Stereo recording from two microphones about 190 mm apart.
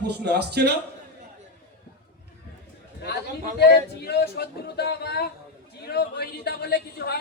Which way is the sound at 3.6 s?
55° left (ahead or behind).